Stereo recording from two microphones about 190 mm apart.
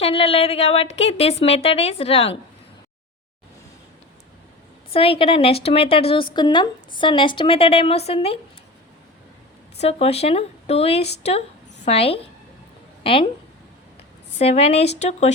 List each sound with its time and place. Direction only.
0.0 s a woman's voice: 30° left (ahead or behind)
4.9 s a woman's voice: 30° left (ahead or behind)
9.7 s a woman's voice: 35° left (ahead or behind)
14.3 s a woman's voice: 35° left (ahead or behind)